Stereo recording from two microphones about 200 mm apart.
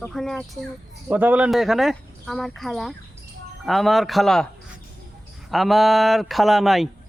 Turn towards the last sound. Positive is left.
turn(degrees=0)  # may be behind; listen again after turning